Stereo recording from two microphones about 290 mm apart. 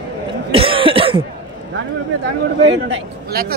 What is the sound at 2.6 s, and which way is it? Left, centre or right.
Speech, right.